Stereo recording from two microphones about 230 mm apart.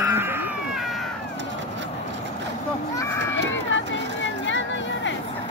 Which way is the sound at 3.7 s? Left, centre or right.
Left.